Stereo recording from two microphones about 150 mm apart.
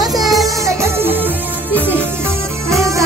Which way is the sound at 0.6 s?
15° right (ahead or behind).